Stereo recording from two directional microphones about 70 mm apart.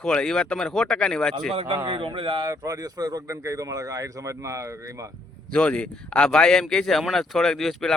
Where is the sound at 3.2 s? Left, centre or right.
Right.